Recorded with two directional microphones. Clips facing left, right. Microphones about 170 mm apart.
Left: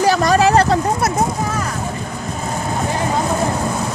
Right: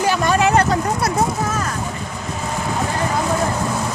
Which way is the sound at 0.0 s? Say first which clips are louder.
Left 3 dB; 40° left (ahead or behind).